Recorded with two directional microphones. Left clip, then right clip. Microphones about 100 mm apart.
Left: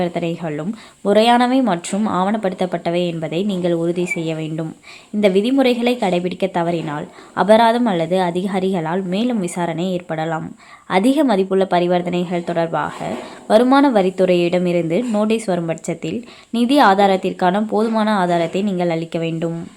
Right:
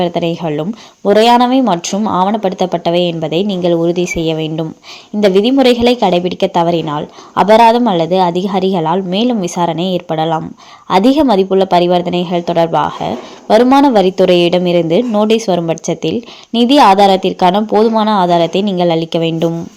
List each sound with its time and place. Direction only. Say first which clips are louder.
0.0 s speech: right 7 dB; 20° right (ahead or behind)
1.0 s a woman's voice: right 5 dB; 10° right (ahead or behind)
13.6 s a woman's voice: right 5 dB; 10° right (ahead or behind)